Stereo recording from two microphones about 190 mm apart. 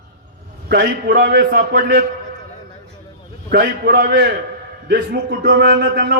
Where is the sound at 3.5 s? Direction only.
55° right (ahead or behind).